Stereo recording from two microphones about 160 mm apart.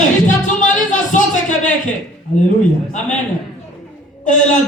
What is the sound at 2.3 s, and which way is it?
Speech, 50° left (ahead or behind).